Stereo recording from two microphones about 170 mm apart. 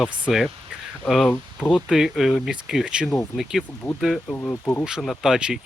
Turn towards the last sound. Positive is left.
turn(degrees=-5)  # may be behind; listen again after turning